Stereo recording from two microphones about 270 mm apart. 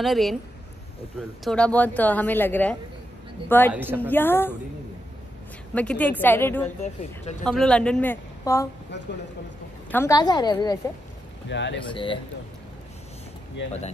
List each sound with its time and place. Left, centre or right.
0.0 s a woman's voice: centre
1.4 s a woman's voice: centre
3.7 s a woman's voice: centre
4.0 s a woman's voice: centre
5.8 s a woman's voice: centre
6.8 s speech: left
7.4 s a woman's voice: centre
9.8 s a woman's voice: centre
11.4 s speech: left
11.9 s a woman's voice: centre